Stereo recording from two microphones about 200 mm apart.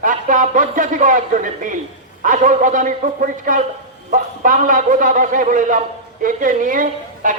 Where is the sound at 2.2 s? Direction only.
40° right (ahead or behind).